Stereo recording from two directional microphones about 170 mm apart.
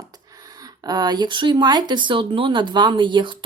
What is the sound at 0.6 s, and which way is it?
Speech, 25° right (ahead or behind).